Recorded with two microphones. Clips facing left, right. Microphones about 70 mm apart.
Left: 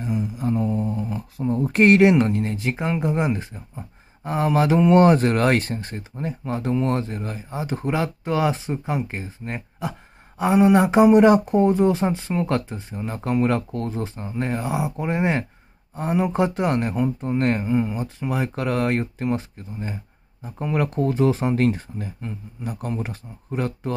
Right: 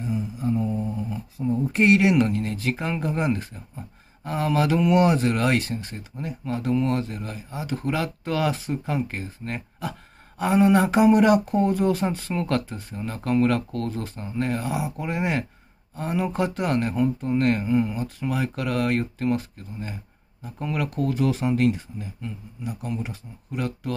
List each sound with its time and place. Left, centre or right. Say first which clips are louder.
0.0 s a sound: left 2 dB; left
2.0 s speech: left 4 dB; left
4.9 s speech: left 6 dB; left